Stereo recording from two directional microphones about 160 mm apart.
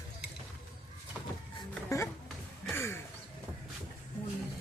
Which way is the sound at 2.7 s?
15° left (ahead or behind).